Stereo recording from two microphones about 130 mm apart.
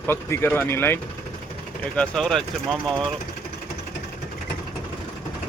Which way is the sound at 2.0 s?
5° left (ahead or behind).